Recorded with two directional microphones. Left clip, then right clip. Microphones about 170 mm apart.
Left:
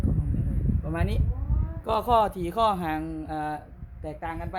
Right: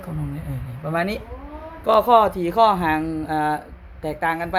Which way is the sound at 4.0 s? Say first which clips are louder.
Right 11 dB; 25° right (ahead or behind).